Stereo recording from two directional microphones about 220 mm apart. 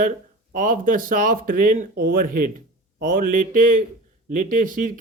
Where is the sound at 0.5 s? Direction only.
40° right (ahead or behind).